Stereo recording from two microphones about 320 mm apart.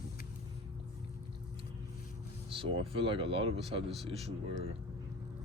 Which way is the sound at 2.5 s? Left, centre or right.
Centre.